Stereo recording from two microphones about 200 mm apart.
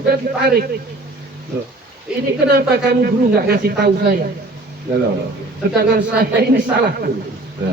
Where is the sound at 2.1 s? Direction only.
5° right (ahead or behind).